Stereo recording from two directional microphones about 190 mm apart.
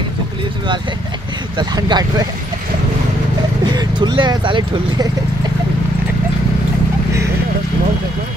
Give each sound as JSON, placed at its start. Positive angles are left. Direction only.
{"t": 1.6, "sound": "speech", "side_deg": -20}
{"t": 3.7, "sound": "speech", "side_deg": -25}